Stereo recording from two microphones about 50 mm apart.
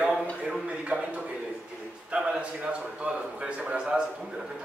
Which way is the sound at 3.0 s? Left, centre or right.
Centre.